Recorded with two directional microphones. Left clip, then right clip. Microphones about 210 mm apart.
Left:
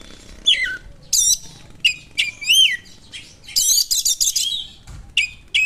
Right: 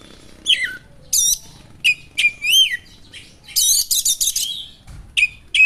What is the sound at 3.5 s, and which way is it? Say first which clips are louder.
Bird: even; 50° left (ahead or behind).